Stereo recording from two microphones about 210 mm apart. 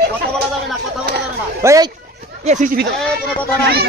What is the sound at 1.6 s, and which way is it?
Speech, 15° right (ahead or behind).